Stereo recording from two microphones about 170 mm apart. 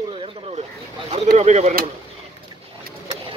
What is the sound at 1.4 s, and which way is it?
Speech, 40° right (ahead or behind).